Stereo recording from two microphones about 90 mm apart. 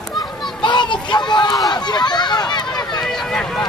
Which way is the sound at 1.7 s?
55° left (ahead or behind).